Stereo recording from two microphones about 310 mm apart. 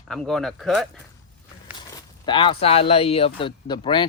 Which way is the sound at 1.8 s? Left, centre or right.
Centre.